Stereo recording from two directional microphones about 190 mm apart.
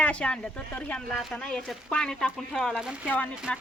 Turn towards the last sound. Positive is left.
turn(degrees=10)  # may be behind; listen again after turning